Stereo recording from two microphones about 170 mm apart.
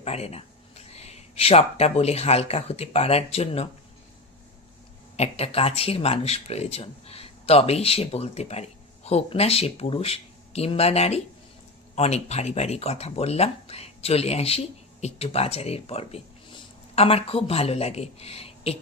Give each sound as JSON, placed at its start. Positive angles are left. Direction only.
{"t": 0.0, "sound": "speech", "side_deg": 40}
{"t": 5.1, "sound": "speech", "side_deg": 40}